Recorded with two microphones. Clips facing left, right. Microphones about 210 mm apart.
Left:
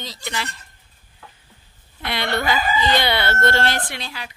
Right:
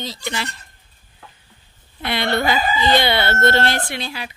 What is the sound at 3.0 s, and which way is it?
Speech, 25° right (ahead or behind).